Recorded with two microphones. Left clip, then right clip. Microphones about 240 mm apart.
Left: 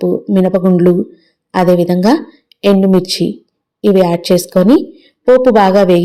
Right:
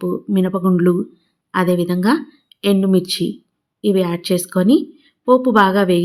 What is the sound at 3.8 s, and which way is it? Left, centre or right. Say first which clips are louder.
Speech: left 7 dB; centre.